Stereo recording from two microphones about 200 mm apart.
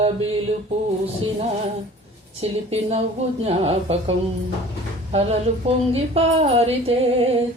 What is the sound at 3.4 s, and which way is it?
Music, 30° right (ahead or behind).